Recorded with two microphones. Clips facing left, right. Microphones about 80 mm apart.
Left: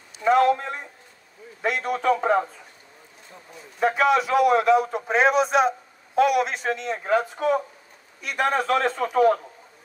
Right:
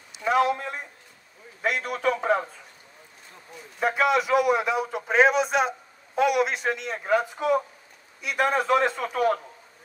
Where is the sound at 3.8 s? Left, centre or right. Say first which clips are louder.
Left 2 dB; centre.